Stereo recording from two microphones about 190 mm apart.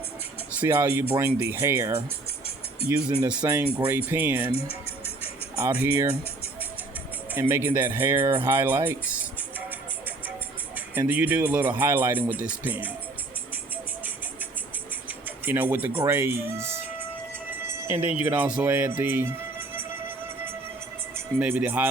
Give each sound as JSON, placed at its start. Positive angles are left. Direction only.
{"t": 0.6, "sound": "speech", "side_deg": -10}
{"t": 3.2, "sound": "speech", "side_deg": -5}
{"t": 5.6, "sound": "speech", "side_deg": -15}
{"t": 7.3, "sound": "speech", "side_deg": -10}
{"t": 10.9, "sound": "speech", "side_deg": -10}
{"t": 15.4, "sound": "speech", "side_deg": -10}
{"t": 17.5, "sound": "music", "side_deg": -10}
{"t": 21.3, "sound": "speech", "side_deg": -10}